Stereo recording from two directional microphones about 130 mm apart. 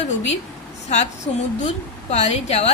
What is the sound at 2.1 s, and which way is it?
Speech, 55° left (ahead or behind).